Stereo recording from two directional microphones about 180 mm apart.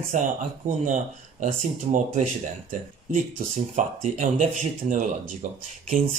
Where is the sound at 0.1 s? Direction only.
45° right (ahead or behind).